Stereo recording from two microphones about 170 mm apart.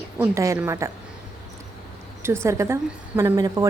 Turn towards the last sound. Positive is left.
turn(degrees=-20)  # may be behind; listen again after turning